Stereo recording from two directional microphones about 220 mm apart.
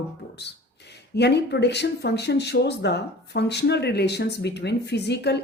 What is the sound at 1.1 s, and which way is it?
Speech, 50° left (ahead or behind).